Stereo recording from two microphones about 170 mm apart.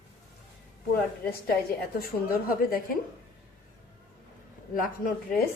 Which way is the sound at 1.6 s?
60° left (ahead or behind).